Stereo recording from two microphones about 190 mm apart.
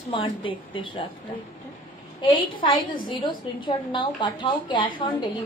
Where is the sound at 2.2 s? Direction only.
25° left (ahead or behind).